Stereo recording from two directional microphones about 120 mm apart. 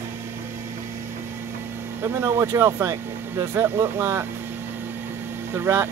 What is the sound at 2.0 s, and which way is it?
Speech, 20° right (ahead or behind).